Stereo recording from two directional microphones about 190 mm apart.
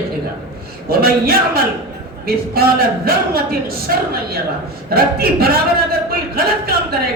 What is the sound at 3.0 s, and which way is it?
A man's voice, 50° right (ahead or behind).